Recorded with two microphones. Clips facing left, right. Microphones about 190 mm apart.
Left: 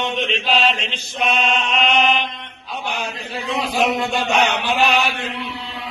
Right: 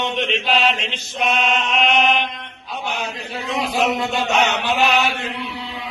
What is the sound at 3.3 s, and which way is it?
A man's voice, centre (ahead or behind).